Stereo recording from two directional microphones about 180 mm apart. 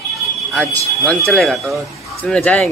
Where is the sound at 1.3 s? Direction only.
Centre (ahead or behind).